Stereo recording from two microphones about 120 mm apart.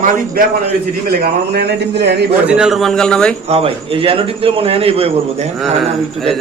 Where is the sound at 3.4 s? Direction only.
55° right (ahead or behind).